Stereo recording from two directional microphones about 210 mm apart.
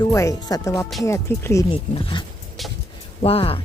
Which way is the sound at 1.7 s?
25° left (ahead or behind).